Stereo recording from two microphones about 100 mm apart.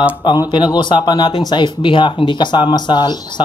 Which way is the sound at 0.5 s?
45° left (ahead or behind).